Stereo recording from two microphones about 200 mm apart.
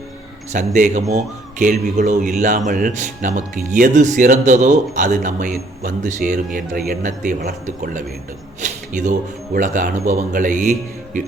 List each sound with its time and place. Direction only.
0.5 s a man's voice: 40° right (ahead or behind)
8.6 s a sound: 40° right (ahead or behind)
9.6 s a man's voice: 40° right (ahead or behind)